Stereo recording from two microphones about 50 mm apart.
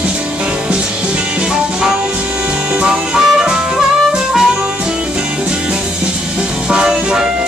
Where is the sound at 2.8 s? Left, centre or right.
Centre.